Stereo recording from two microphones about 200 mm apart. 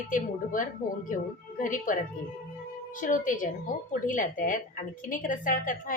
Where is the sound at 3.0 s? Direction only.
40° left (ahead or behind).